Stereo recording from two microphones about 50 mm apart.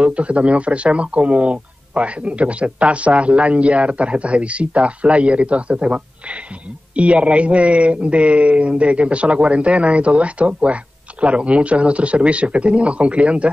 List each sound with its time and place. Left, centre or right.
0.0 s speech: right